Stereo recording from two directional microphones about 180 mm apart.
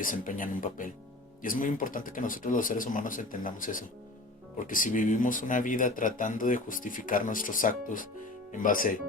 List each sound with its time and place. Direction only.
0.0 s speech: 50° left (ahead or behind)